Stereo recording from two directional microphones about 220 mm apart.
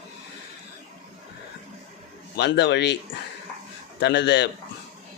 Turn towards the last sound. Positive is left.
turn(degrees=50)  # may be behind; listen again after turning